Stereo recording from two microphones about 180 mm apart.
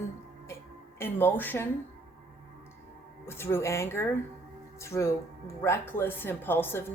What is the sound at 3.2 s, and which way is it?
A woman's voice, 15° left (ahead or behind).